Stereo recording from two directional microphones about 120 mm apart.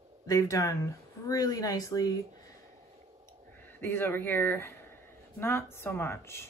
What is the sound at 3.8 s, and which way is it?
Speech, 20° left (ahead or behind).